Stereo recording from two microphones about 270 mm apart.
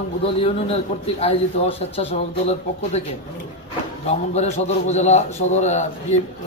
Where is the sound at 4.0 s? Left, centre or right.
Left.